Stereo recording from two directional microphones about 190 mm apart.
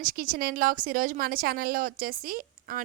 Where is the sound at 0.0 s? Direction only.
50° right (ahead or behind).